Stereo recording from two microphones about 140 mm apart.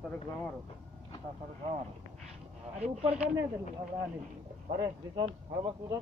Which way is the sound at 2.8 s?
50° right (ahead or behind).